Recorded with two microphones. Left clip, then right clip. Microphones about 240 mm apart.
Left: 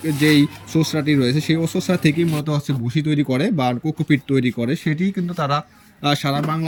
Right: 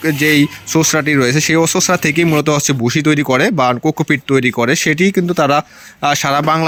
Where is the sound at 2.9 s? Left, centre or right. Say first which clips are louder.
Right 7 dB; centre.